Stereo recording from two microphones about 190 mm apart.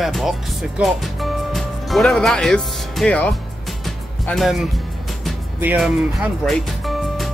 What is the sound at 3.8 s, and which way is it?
Music, centre (ahead or behind).